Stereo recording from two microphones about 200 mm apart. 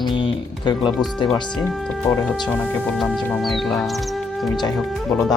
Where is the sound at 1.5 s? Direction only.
5° left (ahead or behind).